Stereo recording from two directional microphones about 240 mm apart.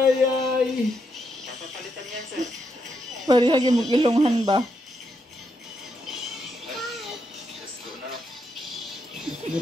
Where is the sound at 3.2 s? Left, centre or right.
Centre.